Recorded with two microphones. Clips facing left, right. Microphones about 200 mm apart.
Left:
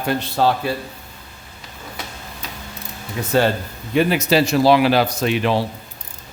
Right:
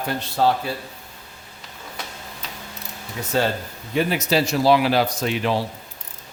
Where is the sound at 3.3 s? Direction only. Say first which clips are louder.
Left 4 dB; 65° left (ahead or behind).